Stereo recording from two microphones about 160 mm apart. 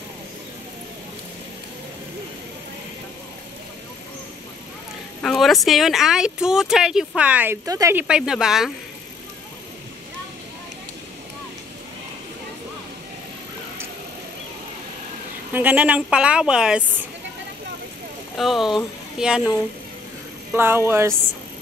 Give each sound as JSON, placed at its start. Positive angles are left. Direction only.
{"t": 5.2, "sound": "speech", "side_deg": 0}
{"t": 7.6, "sound": "speech", "side_deg": -20}
{"t": 15.5, "sound": "a woman's voice", "side_deg": -10}
{"t": 18.3, "sound": "speech", "side_deg": 0}
{"t": 20.5, "sound": "a woman's voice", "side_deg": -15}